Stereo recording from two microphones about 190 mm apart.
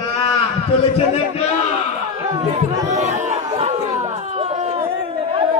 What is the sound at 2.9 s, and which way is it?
Chatter, 40° right (ahead or behind).